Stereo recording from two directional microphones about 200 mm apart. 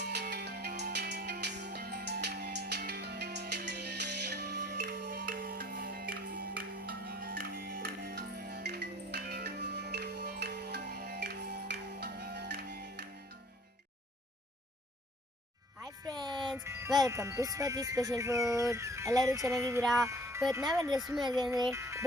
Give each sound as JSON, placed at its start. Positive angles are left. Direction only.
{"t": 0.0, "sound": "music", "side_deg": -55}
{"t": 15.8, "sound": "music", "side_deg": -20}
{"t": 17.0, "sound": "speech", "side_deg": -15}
{"t": 19.8, "sound": "music", "side_deg": 0}
{"t": 20.1, "sound": "wind chime", "side_deg": -15}
{"t": 21.2, "sound": "speech", "side_deg": -20}